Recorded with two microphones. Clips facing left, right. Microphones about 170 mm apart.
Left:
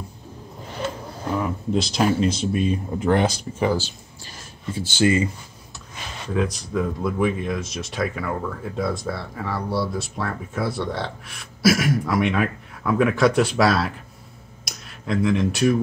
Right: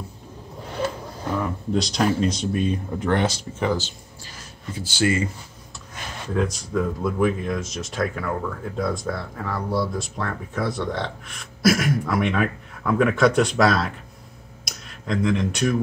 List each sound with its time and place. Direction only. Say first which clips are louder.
1.8 s speech: left 1 dB; 5° left (ahead or behind)
4.7 s speech: left 3 dB; 25° left (ahead or behind)
6.3 s speech: even; 5° left (ahead or behind)
14.6 s a sound: left 1 dB; centre (ahead or behind)